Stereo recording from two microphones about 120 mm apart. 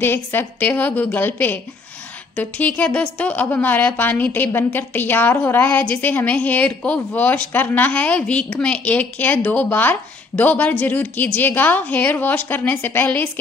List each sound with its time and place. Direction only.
0.0 s a woman's voice: 20° left (ahead or behind)